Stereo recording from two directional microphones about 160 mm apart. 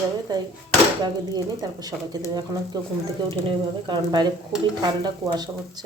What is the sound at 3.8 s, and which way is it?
Speech, 25° right (ahead or behind).